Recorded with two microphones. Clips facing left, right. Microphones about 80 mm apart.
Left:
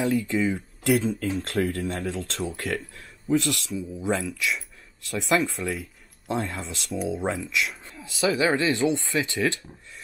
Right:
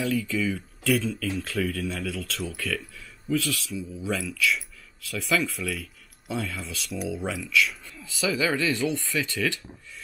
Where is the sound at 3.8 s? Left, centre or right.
Left.